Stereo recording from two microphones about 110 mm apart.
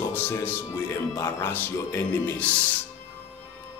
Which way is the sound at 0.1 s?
20° left (ahead or behind).